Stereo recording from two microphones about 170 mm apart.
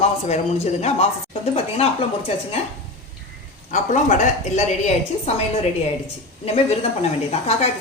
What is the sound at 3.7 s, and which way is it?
A woman's voice, 45° left (ahead or behind).